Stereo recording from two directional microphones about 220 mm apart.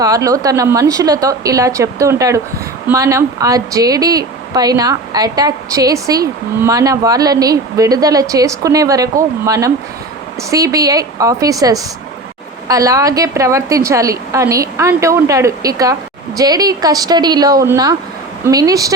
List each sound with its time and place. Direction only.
0.0 s speech: 15° right (ahead or behind)